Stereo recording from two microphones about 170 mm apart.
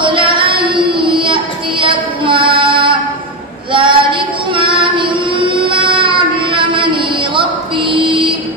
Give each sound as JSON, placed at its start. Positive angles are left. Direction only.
{"t": 0.0, "sound": "child singing", "side_deg": -30}